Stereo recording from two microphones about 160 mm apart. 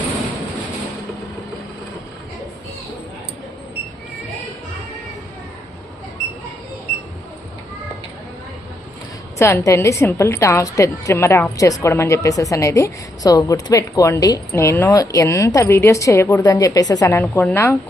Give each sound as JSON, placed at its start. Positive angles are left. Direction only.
{"t": 9.4, "sound": "a woman's voice", "side_deg": 15}